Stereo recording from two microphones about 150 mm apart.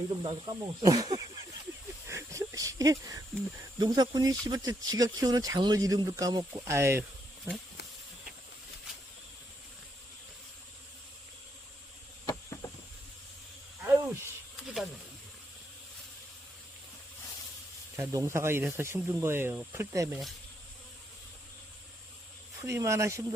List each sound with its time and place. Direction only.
0.2 s speech: 30° right (ahead or behind)
2.0 s a sound: 20° right (ahead or behind)
3.8 s speech: 25° right (ahead or behind)
12.2 s a sound: 20° left (ahead or behind)
13.8 s snake: 15° right (ahead or behind)
14.5 s insect: 5° right (ahead or behind)
17.9 s speech: 20° right (ahead or behind)
22.6 s speech: 20° right (ahead or behind)